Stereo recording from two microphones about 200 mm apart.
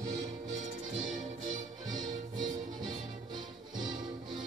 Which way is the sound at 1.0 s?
40° right (ahead or behind).